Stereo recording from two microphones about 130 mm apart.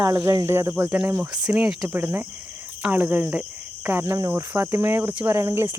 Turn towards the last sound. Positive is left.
turn(degrees=-20)  # may be behind; listen again after turning